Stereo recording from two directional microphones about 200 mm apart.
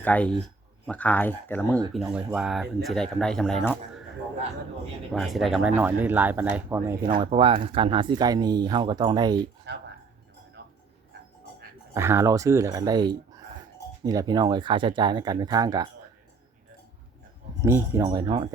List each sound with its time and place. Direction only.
0.0 s speech: 5° left (ahead or behind)
2.0 s speech: 5° right (ahead or behind)
5.1 s speech: centre (ahead or behind)
7.2 s speech: 25° right (ahead or behind)
11.9 s speech: 15° right (ahead or behind)
17.6 s speech: 15° right (ahead or behind)